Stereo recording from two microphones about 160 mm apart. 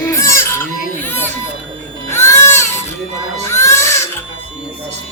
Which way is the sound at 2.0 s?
15° left (ahead or behind).